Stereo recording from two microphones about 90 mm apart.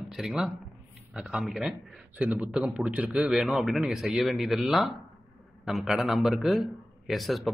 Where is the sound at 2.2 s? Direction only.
15° right (ahead or behind).